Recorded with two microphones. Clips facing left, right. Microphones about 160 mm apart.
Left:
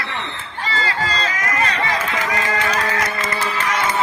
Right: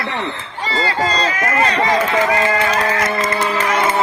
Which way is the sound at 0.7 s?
35° right (ahead or behind).